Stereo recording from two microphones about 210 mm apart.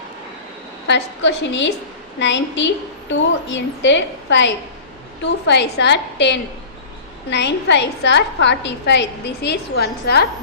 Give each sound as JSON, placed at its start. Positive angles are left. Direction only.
{"t": 0.9, "sound": "a woman's voice", "side_deg": 55}